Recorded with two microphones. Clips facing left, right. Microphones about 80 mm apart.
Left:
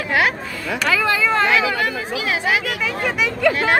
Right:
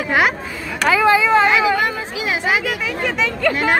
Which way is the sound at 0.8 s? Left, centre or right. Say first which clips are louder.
Right 6 dB; right.